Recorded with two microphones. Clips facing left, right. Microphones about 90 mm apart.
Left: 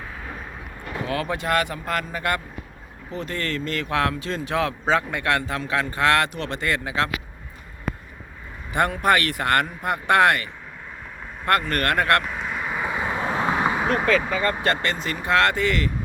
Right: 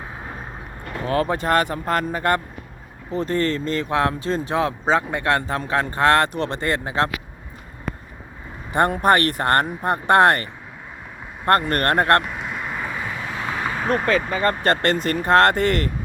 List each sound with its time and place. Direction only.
0.0 s vehicle: 25° right (ahead or behind)
1.0 s speech: 35° right (ahead or behind)
8.7 s speech: 40° right (ahead or behind)
11.7 s speech: 40° right (ahead or behind)
12.2 s vehicle: centre (ahead or behind)
12.9 s vehicle: 25° left (ahead or behind)
13.8 s speech: 10° left (ahead or behind)
14.6 s speech: 50° right (ahead or behind)